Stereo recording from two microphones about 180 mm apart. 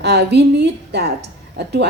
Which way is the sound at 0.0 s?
65° right (ahead or behind).